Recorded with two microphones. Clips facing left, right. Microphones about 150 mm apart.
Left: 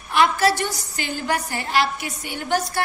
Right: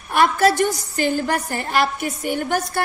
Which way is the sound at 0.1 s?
50° right (ahead or behind).